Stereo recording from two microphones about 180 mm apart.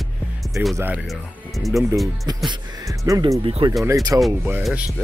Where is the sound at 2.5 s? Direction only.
20° right (ahead or behind).